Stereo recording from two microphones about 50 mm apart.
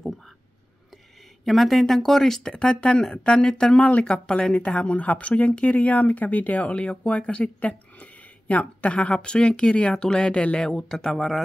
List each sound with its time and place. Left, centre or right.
1.4 s speech: centre